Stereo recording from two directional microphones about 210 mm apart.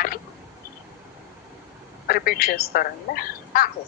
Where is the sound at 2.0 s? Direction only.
45° left (ahead or behind).